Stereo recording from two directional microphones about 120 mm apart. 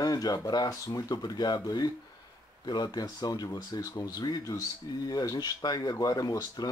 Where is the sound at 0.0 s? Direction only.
30° left (ahead or behind).